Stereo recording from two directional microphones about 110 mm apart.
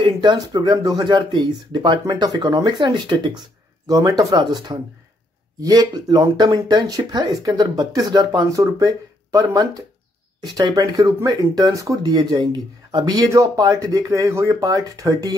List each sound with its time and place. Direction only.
0.0 s speech: 45° right (ahead or behind)